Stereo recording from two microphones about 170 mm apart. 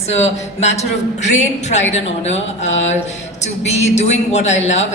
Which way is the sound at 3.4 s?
40° left (ahead or behind).